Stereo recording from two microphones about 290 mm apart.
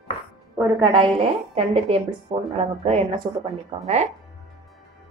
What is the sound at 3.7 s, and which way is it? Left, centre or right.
Speech, centre.